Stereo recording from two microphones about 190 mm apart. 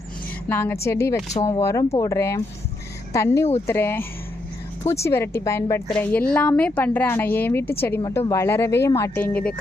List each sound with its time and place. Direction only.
0.4 s a woman's voice: 10° left (ahead or behind)